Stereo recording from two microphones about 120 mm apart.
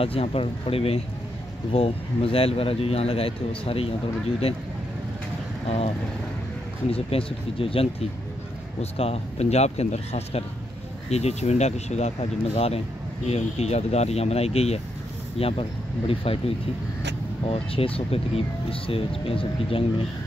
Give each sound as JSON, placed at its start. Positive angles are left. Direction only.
{"t": 0.0, "sound": "speech", "side_deg": 55}
{"t": 6.9, "sound": "speech", "side_deg": 50}